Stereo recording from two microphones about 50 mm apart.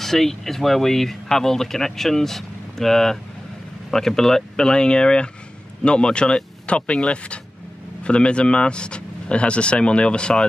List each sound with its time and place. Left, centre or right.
0.0 s speech: centre